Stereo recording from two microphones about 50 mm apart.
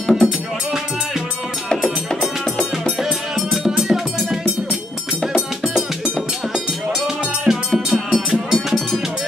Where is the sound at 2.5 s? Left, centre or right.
Centre.